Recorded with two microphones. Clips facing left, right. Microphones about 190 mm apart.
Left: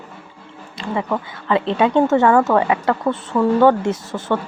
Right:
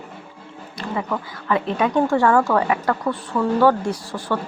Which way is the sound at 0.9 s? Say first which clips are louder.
Left 3 dB; 25° left (ahead or behind).